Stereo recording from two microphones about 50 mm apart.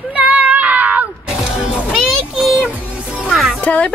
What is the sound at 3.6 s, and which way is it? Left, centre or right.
Speech, left.